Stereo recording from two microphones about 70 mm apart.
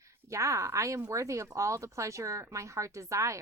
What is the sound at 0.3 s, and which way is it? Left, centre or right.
Speech, right.